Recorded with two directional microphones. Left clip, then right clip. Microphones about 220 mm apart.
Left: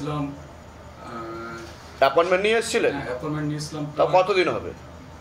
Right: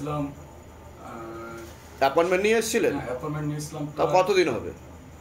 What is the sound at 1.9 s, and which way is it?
Speech, 30° right (ahead or behind).